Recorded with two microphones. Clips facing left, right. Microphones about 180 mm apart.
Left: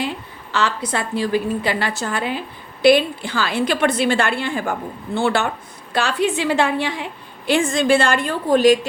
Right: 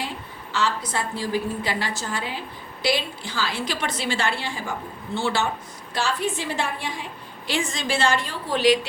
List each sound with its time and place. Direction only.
0.5 s a woman's voice: 65° left (ahead or behind); by 8.9 s 45° left (ahead or behind)